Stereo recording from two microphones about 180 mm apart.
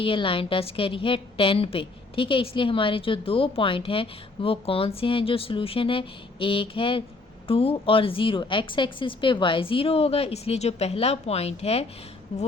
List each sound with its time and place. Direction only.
0.0 s a woman's voice: 30° left (ahead or behind)